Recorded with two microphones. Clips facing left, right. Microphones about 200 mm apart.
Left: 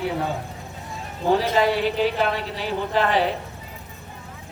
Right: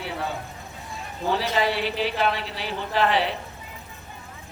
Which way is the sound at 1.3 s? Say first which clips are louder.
Left 4 dB; 45° left (ahead or behind).